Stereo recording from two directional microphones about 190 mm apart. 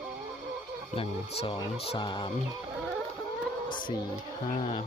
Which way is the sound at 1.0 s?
30° left (ahead or behind).